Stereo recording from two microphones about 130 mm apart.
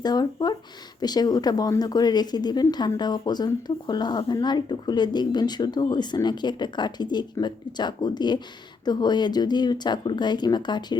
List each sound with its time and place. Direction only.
0.0 s speech: 30° left (ahead or behind)